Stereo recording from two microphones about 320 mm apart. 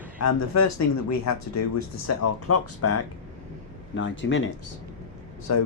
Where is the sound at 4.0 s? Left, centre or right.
Left.